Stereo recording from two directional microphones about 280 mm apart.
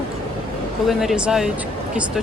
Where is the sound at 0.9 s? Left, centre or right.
Centre.